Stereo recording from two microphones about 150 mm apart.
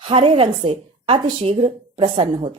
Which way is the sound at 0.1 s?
35° right (ahead or behind).